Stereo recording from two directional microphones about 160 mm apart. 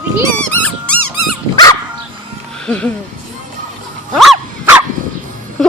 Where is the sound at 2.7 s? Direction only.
10° left (ahead or behind).